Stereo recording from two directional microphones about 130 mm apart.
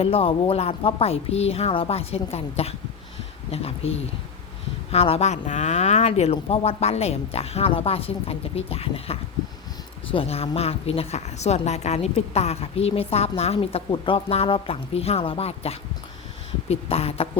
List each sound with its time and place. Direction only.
0.0 s a woman's voice: 50° left (ahead or behind)